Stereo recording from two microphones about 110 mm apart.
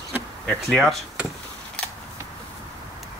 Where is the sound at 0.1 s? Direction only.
15° right (ahead or behind).